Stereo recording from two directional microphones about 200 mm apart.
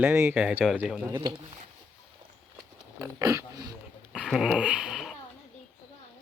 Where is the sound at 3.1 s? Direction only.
15° right (ahead or behind).